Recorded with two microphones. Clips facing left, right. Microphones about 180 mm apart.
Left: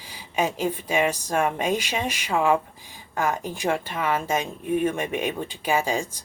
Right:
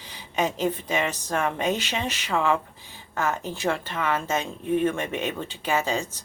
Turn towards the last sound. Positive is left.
turn(degrees=10)  # may be behind; listen again after turning